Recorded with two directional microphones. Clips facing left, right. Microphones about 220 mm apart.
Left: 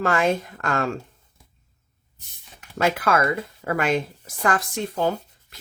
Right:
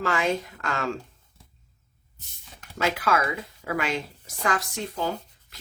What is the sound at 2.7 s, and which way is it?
Speech, 50° left (ahead or behind).